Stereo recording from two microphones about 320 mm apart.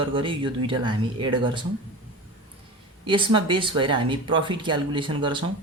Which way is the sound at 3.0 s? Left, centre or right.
Centre.